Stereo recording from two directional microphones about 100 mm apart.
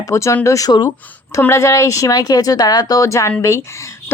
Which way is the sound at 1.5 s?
30° left (ahead or behind).